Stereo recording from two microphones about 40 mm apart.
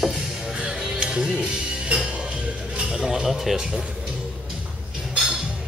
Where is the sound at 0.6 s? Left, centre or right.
Right.